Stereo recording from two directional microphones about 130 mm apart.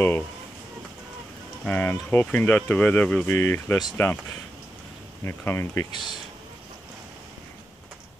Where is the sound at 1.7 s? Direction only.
15° left (ahead or behind).